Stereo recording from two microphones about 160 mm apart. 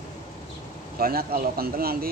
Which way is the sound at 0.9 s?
65° right (ahead or behind).